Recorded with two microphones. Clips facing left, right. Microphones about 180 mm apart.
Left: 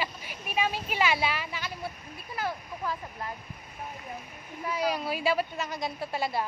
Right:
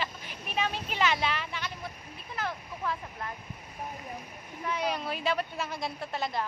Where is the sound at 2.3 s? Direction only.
10° left (ahead or behind).